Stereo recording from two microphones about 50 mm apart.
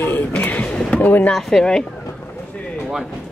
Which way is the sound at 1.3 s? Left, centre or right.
Centre.